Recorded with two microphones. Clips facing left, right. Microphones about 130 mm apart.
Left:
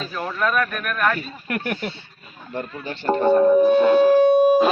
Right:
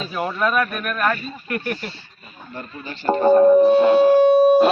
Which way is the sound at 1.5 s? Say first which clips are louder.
Right 1 dB; 60° left (ahead or behind).